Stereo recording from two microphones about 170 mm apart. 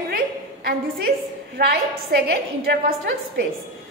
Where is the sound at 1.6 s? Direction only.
65° right (ahead or behind).